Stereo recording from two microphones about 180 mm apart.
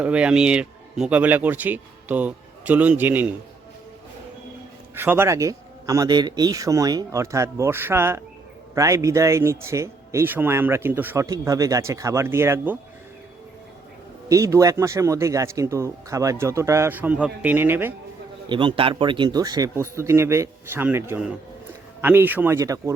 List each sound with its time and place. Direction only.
0.0 s speech: 5° right (ahead or behind)
4.9 s speech: 10° right (ahead or behind)
14.3 s speech: 15° right (ahead or behind)
18.4 s speech: 25° right (ahead or behind)